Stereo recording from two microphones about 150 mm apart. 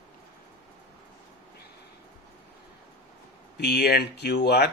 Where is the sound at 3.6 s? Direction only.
90° left.